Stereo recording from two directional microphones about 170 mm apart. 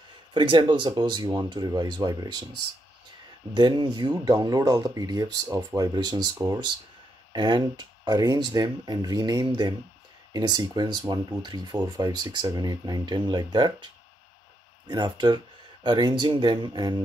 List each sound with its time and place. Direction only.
0.3 s speech: 30° right (ahead or behind)
3.5 s speech: 25° right (ahead or behind)
14.9 s speech: 25° right (ahead or behind)